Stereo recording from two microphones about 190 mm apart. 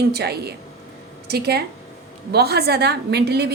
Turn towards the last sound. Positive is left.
turn(degrees=-60)  # may be behind; listen again after turning